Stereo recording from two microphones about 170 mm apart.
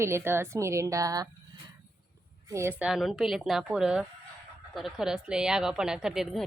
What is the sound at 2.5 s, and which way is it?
A woman's voice, 15° right (ahead or behind).